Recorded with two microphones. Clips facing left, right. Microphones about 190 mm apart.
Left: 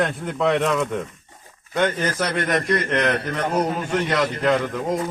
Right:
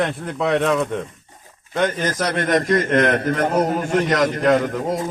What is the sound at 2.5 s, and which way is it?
A man's voice, 45° right (ahead or behind).